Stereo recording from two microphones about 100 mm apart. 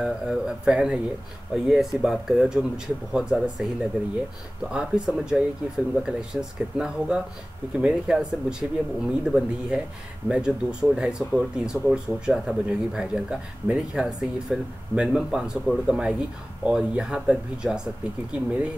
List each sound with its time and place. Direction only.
0.0 s speech: 5° right (ahead or behind)